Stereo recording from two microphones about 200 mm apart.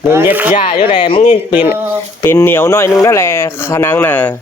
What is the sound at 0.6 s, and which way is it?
Speech, 25° left (ahead or behind).